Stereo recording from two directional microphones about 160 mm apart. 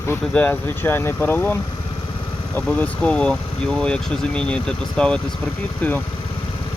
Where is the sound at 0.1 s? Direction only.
10° left (ahead or behind).